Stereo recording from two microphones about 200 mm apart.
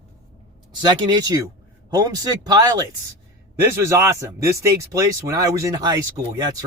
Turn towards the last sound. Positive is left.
turn(degrees=-20)  # may be behind; listen again after turning